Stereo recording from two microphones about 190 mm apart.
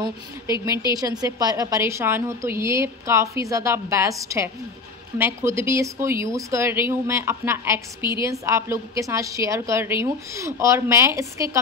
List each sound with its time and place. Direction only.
0.9 s a woman's voice: 20° right (ahead or behind)